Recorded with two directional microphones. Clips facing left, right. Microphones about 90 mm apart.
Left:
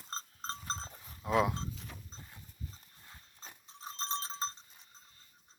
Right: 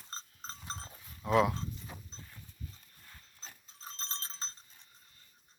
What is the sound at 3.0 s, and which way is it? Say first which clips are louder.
Dog: left 1 dB; 20° left (ahead or behind).